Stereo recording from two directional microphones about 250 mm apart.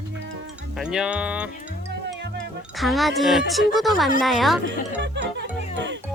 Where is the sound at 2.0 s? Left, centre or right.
Right.